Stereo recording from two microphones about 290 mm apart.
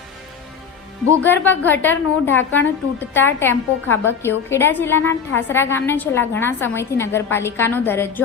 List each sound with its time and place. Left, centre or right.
1.2 s a woman's voice: centre